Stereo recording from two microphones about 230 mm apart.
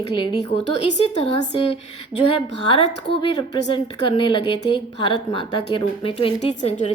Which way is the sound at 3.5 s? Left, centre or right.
Left.